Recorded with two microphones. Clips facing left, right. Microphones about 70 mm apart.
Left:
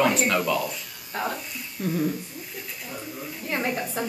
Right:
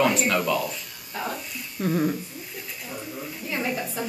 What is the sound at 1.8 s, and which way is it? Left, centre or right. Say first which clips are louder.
Speech: right 2 dB; right.